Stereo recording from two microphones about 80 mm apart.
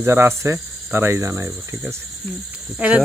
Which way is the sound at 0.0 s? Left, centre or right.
Right.